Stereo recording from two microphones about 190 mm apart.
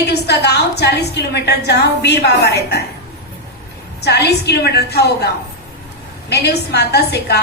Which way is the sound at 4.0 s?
60° left (ahead or behind).